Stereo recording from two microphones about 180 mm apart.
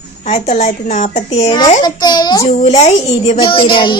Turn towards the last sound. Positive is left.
turn(degrees=25)  # may be behind; listen again after turning